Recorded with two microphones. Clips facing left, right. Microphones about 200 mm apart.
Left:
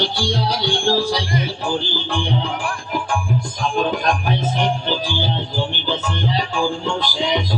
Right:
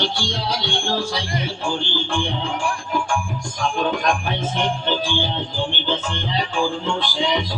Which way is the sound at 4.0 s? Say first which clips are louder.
Left 1 dB; 40° left (ahead or behind).